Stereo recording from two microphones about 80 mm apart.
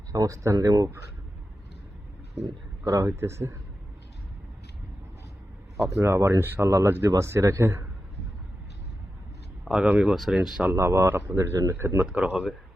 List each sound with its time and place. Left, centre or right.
0.1 s speech: right
2.4 s speech: right
3.1 s speech: right
6.0 s speech: right
9.8 s speech: centre
10.7 s speech: right
12.1 s speech: centre